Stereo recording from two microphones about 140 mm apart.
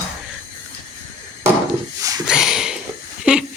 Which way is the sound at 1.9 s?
25° right (ahead or behind).